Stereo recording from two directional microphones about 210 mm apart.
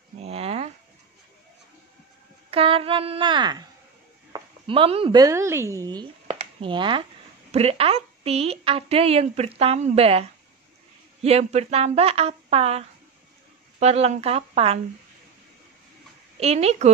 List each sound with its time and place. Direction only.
0.2 s a sound: 30° right (ahead or behind)
2.5 s a woman's voice: 25° right (ahead or behind)
11.2 s a woman's voice: 30° right (ahead or behind)
16.3 s a woman's voice: 30° right (ahead or behind)